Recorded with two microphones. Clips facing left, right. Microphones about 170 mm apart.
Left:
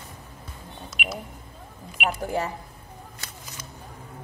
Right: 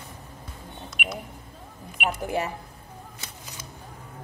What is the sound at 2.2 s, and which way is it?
Speech, 15° right (ahead or behind).